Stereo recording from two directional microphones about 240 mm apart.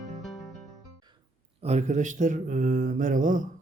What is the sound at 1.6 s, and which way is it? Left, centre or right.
Speech, right.